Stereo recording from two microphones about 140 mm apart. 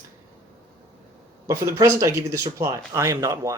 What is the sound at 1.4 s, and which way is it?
Speech, 20° right (ahead or behind).